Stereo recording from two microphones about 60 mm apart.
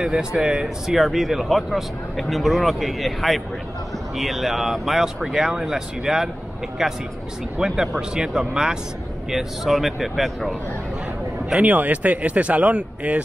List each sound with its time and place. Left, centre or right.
0.0 s speech: centre
11.6 s speech: right